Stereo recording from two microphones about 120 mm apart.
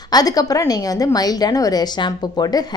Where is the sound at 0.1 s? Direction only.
30° left (ahead or behind).